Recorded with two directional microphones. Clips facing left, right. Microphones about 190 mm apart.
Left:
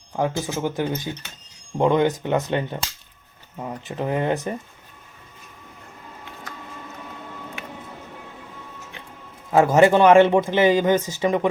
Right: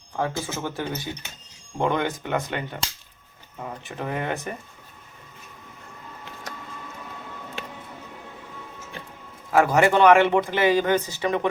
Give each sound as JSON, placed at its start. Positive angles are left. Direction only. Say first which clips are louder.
{"t": 0.2, "sound": "speech", "louder": "left 4 dB", "side_deg": 15}
{"t": 9.5, "sound": "speech", "louder": "left 4 dB", "side_deg": 20}